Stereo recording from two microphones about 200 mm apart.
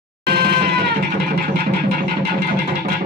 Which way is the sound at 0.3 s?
55° right (ahead or behind).